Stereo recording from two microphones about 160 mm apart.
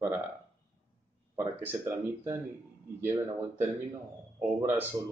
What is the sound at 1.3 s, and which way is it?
Speech, 15° right (ahead or behind).